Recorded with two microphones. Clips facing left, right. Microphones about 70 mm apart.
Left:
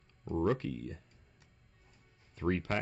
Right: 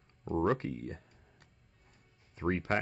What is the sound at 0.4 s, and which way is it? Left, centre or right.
Speech, right.